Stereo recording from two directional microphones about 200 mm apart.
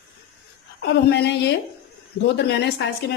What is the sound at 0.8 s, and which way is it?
Speech, 60° left (ahead or behind).